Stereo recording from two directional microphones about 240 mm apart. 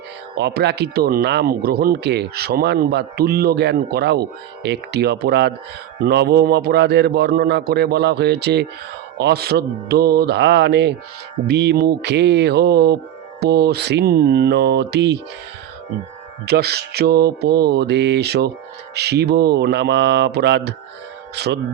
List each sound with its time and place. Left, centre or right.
0.3 s speech: right
16.5 s speech: right